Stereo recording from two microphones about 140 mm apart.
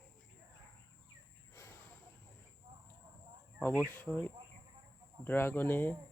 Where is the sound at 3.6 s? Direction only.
15° left (ahead or behind).